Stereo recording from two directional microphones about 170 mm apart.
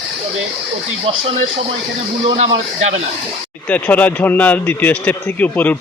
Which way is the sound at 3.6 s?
10° left (ahead or behind).